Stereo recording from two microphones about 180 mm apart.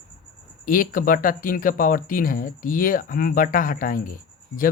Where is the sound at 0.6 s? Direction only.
50° left (ahead or behind).